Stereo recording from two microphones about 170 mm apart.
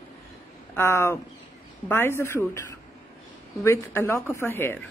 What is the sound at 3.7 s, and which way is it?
Speech, 15° left (ahead or behind).